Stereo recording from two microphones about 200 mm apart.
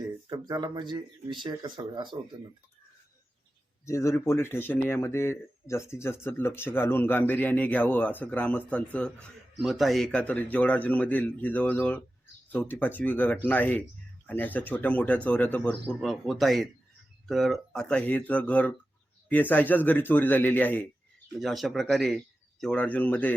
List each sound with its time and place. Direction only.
0.3 s speech: 20° right (ahead or behind)
3.8 s speech: 15° left (ahead or behind)